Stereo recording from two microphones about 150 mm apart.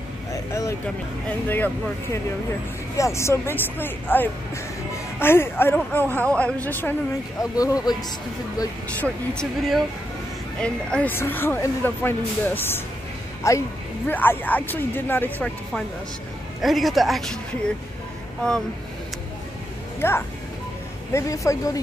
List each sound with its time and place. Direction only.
0.3 s vehicle: 20° left (ahead or behind)
3.0 s a woman's voice: 20° left (ahead or behind)
7.5 s speech: 25° left (ahead or behind)
9.0 s a woman's voice: 5° left (ahead or behind)
16.6 s a woman's voice: centre (ahead or behind)
20.0 s a woman's voice: 15° left (ahead or behind)